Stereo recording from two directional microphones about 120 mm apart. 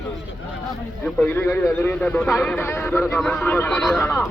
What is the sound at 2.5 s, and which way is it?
Speech, 20° left (ahead or behind).